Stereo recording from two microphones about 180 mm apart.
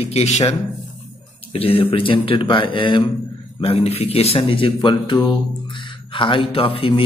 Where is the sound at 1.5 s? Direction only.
30° left (ahead or behind).